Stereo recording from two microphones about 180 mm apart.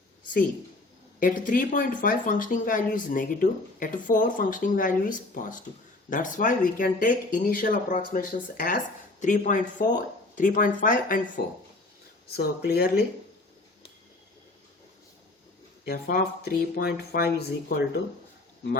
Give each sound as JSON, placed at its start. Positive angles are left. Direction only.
{"t": 1.2, "sound": "speech", "side_deg": 50}
{"t": 15.8, "sound": "speech", "side_deg": 60}
{"t": 17.7, "sound": "speech", "side_deg": 50}